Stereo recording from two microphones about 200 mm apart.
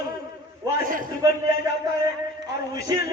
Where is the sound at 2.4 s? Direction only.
15° right (ahead or behind).